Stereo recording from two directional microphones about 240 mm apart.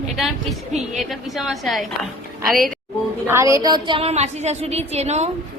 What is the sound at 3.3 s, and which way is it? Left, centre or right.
A woman's voice, centre.